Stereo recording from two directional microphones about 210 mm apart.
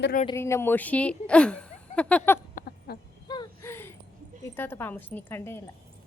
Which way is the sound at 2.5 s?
45° left (ahead or behind).